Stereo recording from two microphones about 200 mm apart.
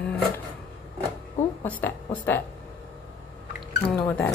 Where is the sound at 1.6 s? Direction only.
10° left (ahead or behind).